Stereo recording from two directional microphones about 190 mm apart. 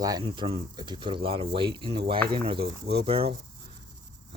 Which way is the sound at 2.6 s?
60° right (ahead or behind).